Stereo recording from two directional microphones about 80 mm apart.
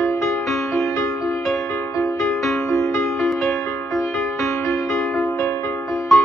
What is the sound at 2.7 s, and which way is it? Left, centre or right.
Music, left.